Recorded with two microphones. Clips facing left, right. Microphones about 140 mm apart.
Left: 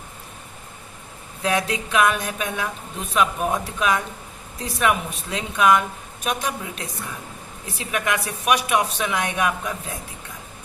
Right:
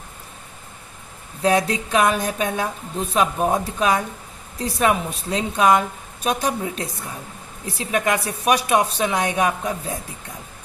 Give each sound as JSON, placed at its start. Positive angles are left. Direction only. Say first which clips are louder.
{"t": 1.4, "sound": "a woman's voice", "louder": "right 4 dB", "side_deg": -35}